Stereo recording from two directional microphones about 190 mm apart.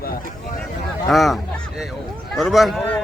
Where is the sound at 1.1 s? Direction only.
Centre (ahead or behind).